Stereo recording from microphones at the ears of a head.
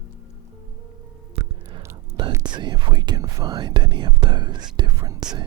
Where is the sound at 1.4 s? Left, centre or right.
Right.